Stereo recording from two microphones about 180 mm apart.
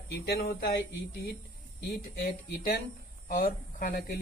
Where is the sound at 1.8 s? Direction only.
50° left (ahead or behind).